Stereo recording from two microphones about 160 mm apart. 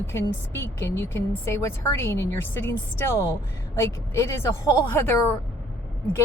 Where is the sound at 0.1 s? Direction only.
15° left (ahead or behind).